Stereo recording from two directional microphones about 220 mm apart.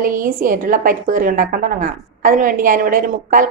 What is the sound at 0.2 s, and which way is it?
A woman's voice, 40° right (ahead or behind).